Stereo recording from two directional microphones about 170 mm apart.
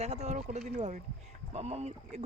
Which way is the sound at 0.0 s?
40° right (ahead or behind).